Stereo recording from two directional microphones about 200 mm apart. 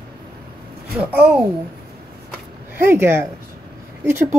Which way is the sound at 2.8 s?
10° right (ahead or behind).